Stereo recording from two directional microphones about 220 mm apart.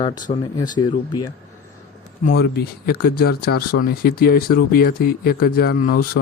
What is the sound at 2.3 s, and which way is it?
Speech, 45° left (ahead or behind).